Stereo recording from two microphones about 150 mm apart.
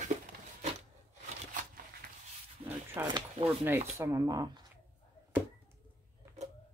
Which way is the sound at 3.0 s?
15° right (ahead or behind).